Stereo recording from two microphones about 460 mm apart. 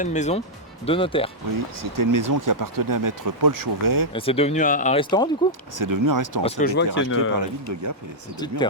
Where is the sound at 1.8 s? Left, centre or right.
Right.